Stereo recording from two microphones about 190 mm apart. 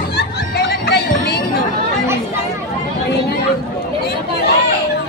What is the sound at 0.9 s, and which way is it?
Music, 60° left (ahead or behind).